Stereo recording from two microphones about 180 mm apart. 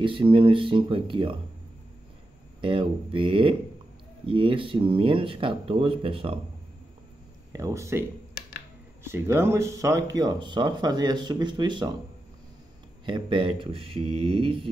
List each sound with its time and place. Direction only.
0.0 s speech: 30° right (ahead or behind)
2.6 s speech: 30° right (ahead or behind)
7.5 s speech: 15° right (ahead or behind)
9.0 s speech: 15° right (ahead or behind)
13.0 s speech: 25° right (ahead or behind)